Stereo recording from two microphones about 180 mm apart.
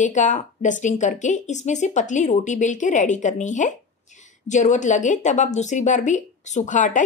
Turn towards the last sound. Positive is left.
turn(degrees=45)  # may be behind; listen again after turning